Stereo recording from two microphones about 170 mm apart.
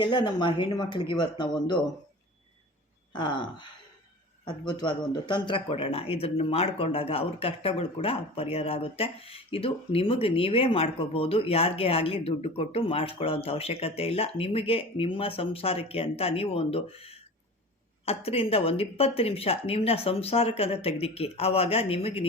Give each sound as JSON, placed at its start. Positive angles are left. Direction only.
{"t": 0.0, "sound": "speech", "side_deg": 25}
{"t": 3.1, "sound": "speech", "side_deg": 30}